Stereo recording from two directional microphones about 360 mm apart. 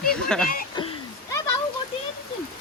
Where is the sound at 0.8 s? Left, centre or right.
Centre.